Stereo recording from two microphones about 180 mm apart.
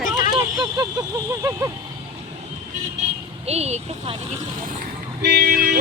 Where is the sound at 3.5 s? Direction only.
35° right (ahead or behind).